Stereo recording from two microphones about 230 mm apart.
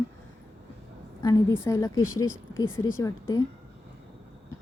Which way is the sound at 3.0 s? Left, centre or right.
Centre.